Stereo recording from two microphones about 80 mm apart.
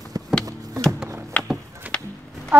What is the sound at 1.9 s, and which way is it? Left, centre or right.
Music, right.